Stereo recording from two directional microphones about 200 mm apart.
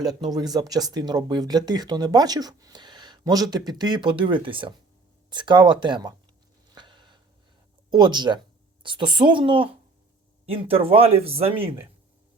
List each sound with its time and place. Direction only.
0.0 s speech: 20° right (ahead or behind)
6.7 s a sound: 25° right (ahead or behind)
7.9 s speech: 20° right (ahead or behind)